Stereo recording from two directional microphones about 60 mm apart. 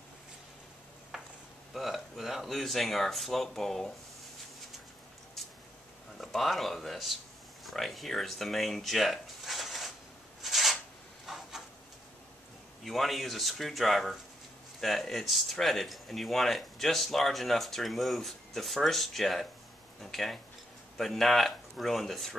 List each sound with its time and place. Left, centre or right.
1.1 s a sound: centre
1.7 s speech: centre
6.1 s speech: centre
10.4 s a sound: centre
11.2 s printer: centre
12.8 s speech: centre